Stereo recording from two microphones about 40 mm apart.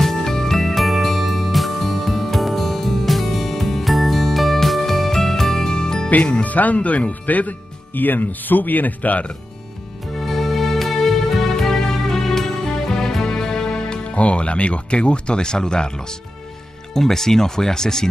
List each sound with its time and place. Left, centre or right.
0.0 s music: centre
6.4 s speech: left
10.1 s music: centre
14.1 s speech: left; by 18.0 s centre